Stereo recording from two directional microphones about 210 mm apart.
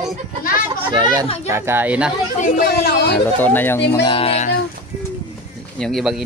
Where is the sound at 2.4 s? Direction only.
45° left (ahead or behind).